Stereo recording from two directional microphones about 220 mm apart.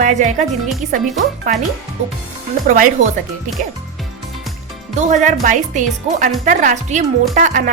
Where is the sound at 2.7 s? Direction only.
35° right (ahead or behind).